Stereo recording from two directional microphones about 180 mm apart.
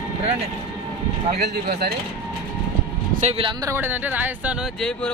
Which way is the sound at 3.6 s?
15° right (ahead or behind).